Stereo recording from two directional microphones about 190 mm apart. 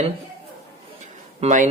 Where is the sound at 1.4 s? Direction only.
40° right (ahead or behind).